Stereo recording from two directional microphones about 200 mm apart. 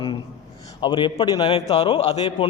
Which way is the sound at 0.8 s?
25° left (ahead or behind).